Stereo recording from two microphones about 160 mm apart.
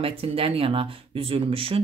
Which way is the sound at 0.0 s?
35° right (ahead or behind).